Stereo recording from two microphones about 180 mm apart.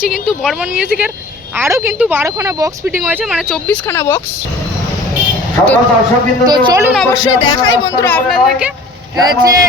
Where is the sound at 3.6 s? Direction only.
10° left (ahead or behind).